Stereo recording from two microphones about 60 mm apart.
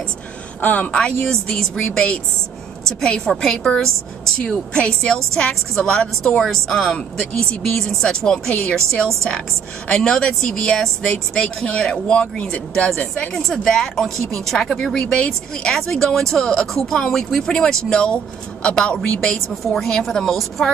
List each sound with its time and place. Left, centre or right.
0.6 s a woman's voice: left
1.0 s speech: centre
13.5 s speech: centre
19.6 s speech: centre